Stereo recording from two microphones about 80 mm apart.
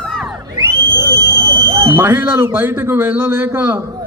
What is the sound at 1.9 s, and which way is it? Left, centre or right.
A man's voice, right.